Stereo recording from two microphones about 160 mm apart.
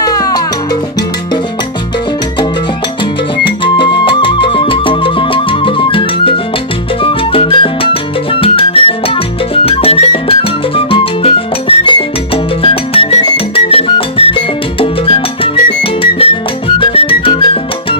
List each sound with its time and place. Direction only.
0.0 s music: 25° left (ahead or behind)
3.6 s music: 30° left (ahead or behind)
7.0 s salsa music: 35° left (ahead or behind)
9.7 s music: 40° left (ahead or behind)